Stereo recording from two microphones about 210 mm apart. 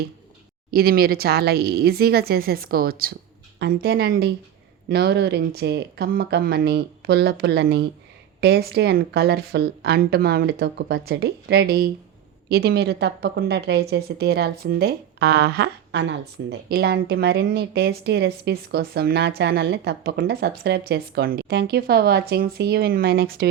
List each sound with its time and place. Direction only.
0.7 s a woman's voice: 45° right (ahead or behind)